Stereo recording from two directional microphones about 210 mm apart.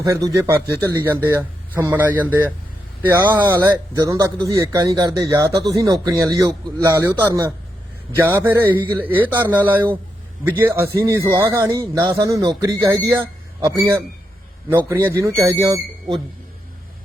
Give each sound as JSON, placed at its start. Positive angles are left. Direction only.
{"t": 0.1, "sound": "speech", "side_deg": -15}
{"t": 14.7, "sound": "speech", "side_deg": -10}